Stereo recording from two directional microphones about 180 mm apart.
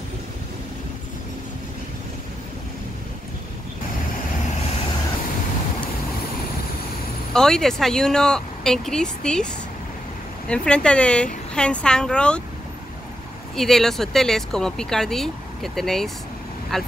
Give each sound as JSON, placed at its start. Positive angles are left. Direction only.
{"t": 7.3, "sound": "speech", "side_deg": 5}
{"t": 10.5, "sound": "speech", "side_deg": 5}
{"t": 13.6, "sound": "speech", "side_deg": 0}